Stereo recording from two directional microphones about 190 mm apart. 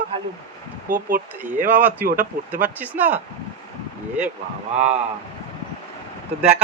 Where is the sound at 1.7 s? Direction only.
10° right (ahead or behind).